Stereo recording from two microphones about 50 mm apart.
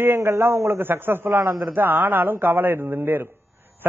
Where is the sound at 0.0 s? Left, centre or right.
Right.